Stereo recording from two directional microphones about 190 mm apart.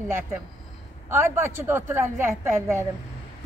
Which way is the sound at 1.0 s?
15° right (ahead or behind).